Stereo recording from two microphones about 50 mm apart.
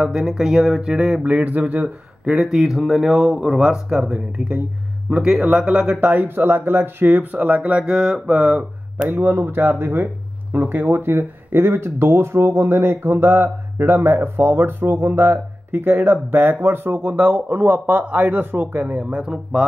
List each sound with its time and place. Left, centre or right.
0.0 s speech: centre
1.2 s speech: right
2.3 s speech: centre
5.1 s speech: centre
5.9 s speech: right
6.2 s speech: right
7.3 s speech: right
7.9 s speech: centre
8.4 s speech: right
9.1 s speech: right; by 19.6 s centre